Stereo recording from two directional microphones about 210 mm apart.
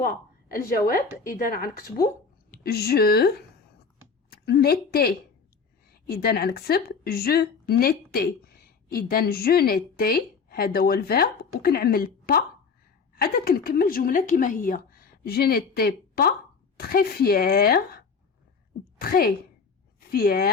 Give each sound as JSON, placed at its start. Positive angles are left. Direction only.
{"t": 0.0, "sound": "a woman's voice", "side_deg": 45}